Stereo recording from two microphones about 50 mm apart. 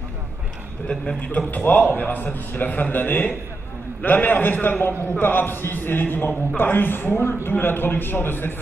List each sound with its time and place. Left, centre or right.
0.8 s a man's voice: centre
1.5 s a man's voice: left